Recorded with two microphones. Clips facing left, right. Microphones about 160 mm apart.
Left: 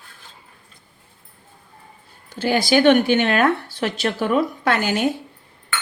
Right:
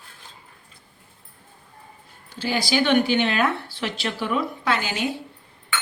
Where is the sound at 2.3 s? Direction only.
50° left (ahead or behind).